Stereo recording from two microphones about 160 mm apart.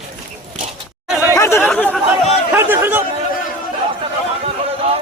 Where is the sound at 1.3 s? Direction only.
15° left (ahead or behind).